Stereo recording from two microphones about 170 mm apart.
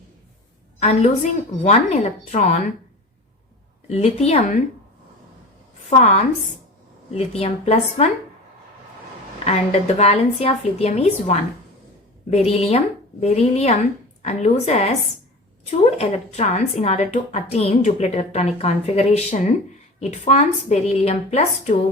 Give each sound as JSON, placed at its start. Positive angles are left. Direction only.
{"t": 0.8, "sound": "a woman's voice", "side_deg": 40}
{"t": 3.8, "sound": "a woman's voice", "side_deg": 40}
{"t": 6.0, "sound": "a woman's voice", "side_deg": 40}
{"t": 9.4, "sound": "a woman's voice", "side_deg": 40}